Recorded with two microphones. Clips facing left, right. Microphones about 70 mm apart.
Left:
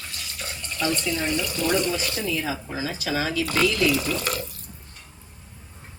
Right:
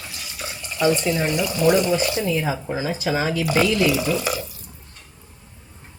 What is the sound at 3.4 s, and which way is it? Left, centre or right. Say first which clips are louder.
Speech: right 3 dB; centre.